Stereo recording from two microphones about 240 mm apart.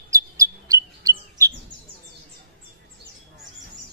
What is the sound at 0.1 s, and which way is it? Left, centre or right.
Bird, centre.